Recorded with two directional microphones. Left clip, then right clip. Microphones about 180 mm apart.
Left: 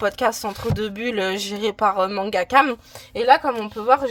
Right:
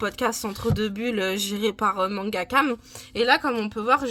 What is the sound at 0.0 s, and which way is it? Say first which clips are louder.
Speech: left 5 dB; 30° left (ahead or behind).